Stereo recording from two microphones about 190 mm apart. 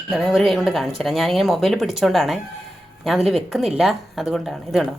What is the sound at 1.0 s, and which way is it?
Speech, centre (ahead or behind).